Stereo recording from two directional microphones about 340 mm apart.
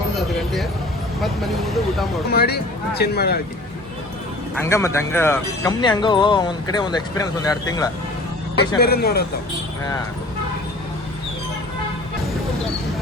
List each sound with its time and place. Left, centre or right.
0.2 s a sound: centre
1.2 s speech: centre
2.3 s speech: left
4.6 s speech: centre
8.8 s speech: left